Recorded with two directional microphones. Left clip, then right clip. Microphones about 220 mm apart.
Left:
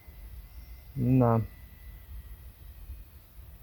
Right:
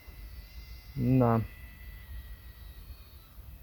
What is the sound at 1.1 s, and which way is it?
Speech, 35° left (ahead or behind).